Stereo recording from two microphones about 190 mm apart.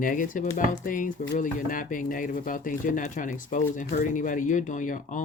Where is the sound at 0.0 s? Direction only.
45° left (ahead or behind).